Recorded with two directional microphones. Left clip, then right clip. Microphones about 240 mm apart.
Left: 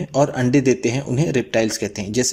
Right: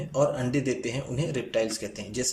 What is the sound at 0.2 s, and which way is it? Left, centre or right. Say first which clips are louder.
Speech: left 8 dB; left.